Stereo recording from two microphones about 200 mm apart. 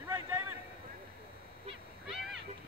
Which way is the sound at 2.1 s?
Centre (ahead or behind).